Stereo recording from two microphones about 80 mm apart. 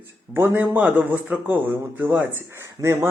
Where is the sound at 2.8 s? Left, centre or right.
Right.